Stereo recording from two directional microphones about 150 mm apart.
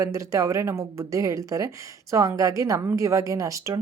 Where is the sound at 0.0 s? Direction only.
20° right (ahead or behind).